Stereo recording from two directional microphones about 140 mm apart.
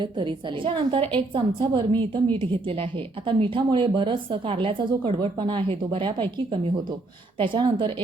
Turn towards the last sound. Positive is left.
turn(degrees=-35)  # may be behind; listen again after turning